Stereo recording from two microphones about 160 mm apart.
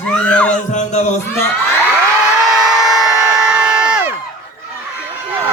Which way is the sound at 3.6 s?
5° right (ahead or behind).